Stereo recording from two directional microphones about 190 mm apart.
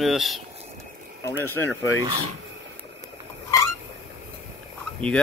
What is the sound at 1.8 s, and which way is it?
Speech, 90° left.